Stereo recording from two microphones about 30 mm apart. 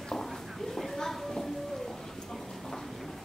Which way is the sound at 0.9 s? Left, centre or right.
Centre.